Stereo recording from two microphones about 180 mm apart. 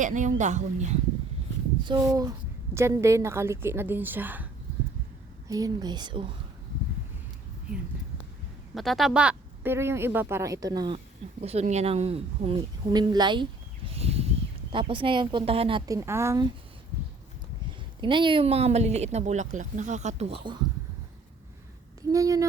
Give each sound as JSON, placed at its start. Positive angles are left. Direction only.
{"t": 0.0, "sound": "speech", "side_deg": -45}
{"t": 1.8, "sound": "a woman's voice", "side_deg": -25}
{"t": 5.5, "sound": "speech", "side_deg": -20}
{"t": 8.7, "sound": "a woman's voice", "side_deg": 0}
{"t": 15.9, "sound": "a woman's voice", "side_deg": -15}
{"t": 18.0, "sound": "speech", "side_deg": -25}
{"t": 22.1, "sound": "speech", "side_deg": -20}